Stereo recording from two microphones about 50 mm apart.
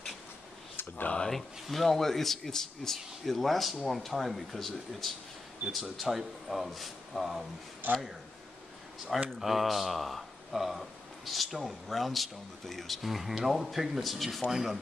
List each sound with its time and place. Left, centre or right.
0.7 s a sound: left
1.3 s speech: centre
9.4 s speech: centre